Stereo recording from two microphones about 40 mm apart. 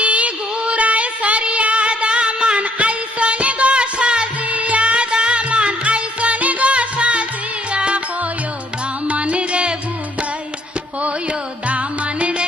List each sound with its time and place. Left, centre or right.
0.0 s a sound: right
4.5 s music: right
11.0 s music: right